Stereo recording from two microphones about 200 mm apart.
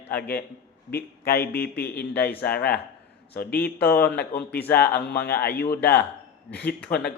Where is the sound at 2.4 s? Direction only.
50° left (ahead or behind).